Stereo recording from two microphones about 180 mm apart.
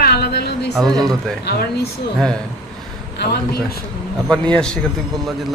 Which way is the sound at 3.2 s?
60° left (ahead or behind).